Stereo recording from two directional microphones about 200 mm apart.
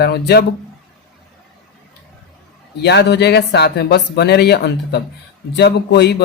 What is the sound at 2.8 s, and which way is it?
Speech, 55° left (ahead or behind).